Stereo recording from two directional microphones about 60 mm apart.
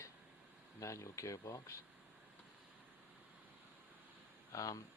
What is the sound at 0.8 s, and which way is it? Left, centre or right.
Speech, left.